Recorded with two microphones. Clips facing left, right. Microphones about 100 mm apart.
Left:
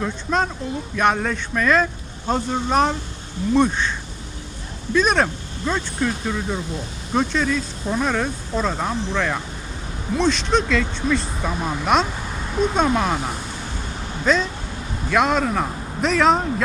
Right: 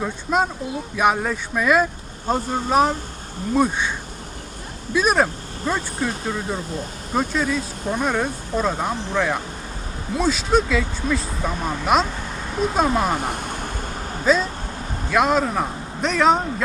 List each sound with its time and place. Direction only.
0.0 s speech: 10° right (ahead or behind)
4.9 s speech: 5° right (ahead or behind)
13.1 s vehicle: 55° right (ahead or behind)
14.3 s speech: 5° right (ahead or behind)